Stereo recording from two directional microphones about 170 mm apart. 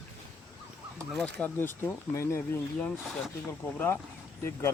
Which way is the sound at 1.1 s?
5° left (ahead or behind).